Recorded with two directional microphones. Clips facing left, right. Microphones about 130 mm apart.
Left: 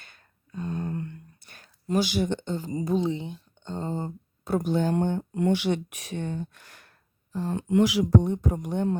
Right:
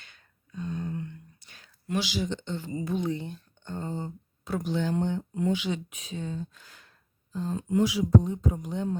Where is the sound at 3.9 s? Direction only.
45° left (ahead or behind); by 8.9 s 65° left (ahead or behind).